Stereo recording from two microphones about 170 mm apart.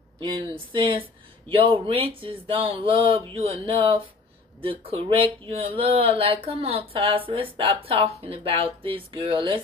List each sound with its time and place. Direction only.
0.2 s speech: 30° right (ahead or behind)